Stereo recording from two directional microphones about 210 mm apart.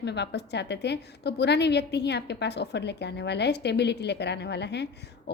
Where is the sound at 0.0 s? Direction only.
55° left (ahead or behind).